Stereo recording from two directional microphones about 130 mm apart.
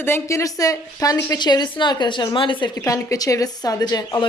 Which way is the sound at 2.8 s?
25° left (ahead or behind).